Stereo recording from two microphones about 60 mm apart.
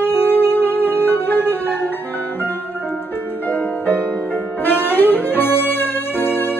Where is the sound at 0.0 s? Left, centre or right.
Left.